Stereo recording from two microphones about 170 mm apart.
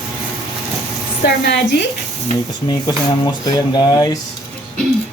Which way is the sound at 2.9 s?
25° left (ahead or behind).